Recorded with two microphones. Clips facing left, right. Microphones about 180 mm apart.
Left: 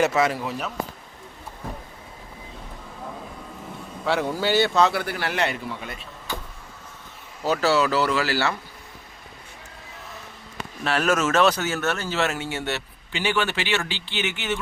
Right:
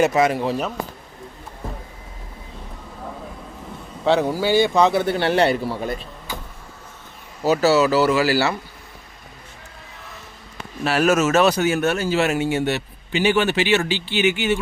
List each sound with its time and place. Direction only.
0.0 s speech: 15° right (ahead or behind)
4.0 s a man's voice: 20° right (ahead or behind); by 6.1 s 35° right (ahead or behind)
7.4 s speech: 5° right (ahead or behind)
10.8 s speech: 10° right (ahead or behind)